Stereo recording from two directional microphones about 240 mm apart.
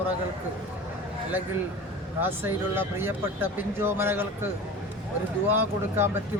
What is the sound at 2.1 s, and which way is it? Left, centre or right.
Speech, centre.